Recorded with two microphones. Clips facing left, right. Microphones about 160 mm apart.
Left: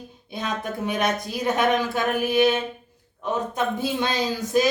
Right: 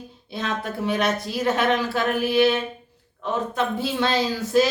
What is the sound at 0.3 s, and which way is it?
Speech, 15° left (ahead or behind).